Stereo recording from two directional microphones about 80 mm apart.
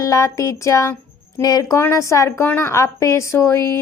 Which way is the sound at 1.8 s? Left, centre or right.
Left.